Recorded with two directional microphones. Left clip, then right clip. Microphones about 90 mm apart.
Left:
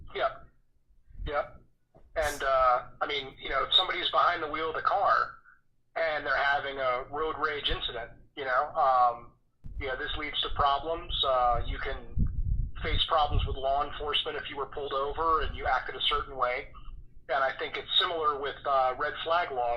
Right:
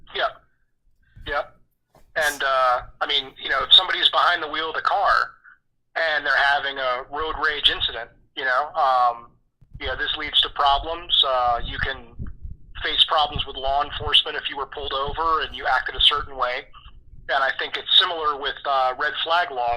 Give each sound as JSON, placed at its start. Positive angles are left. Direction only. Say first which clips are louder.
{"t": 0.1, "sound": "hiccup", "louder": "right 6 dB", "side_deg": -35}
{"t": 1.2, "sound": "a sound", "louder": "right 6 dB", "side_deg": -30}
{"t": 3.3, "sound": "speech", "louder": "right 10 dB", "side_deg": -30}